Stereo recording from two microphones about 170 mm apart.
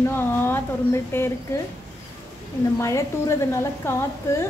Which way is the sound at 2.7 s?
15° left (ahead or behind).